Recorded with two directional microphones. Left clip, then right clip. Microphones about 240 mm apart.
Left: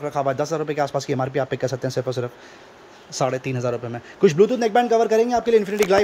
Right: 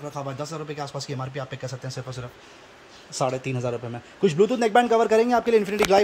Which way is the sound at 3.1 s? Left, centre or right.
Centre.